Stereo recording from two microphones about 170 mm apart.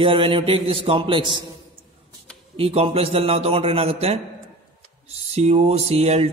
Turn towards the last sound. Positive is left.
turn(degrees=-40)  # may be behind; listen again after turning